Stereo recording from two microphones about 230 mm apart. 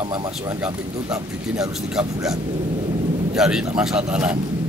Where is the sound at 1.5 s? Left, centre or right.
Centre.